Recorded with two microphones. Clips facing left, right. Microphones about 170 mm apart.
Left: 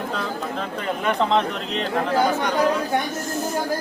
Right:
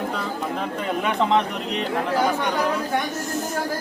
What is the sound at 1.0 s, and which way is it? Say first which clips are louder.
Speech: left 1 dB; 10° right (ahead or behind).